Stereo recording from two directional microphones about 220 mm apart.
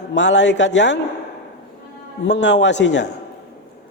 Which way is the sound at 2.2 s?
50° left (ahead or behind).